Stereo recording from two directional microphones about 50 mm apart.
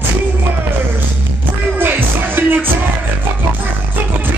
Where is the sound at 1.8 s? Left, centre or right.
Right.